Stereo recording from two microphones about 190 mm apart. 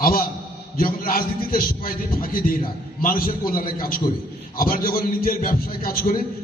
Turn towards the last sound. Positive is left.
turn(degrees=50)  # may be behind; listen again after turning